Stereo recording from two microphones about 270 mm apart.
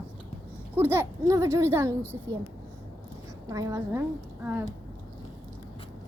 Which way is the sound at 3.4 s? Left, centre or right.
Centre.